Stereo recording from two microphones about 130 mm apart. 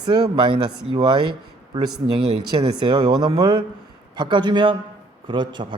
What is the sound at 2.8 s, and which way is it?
Speech, 35° right (ahead or behind).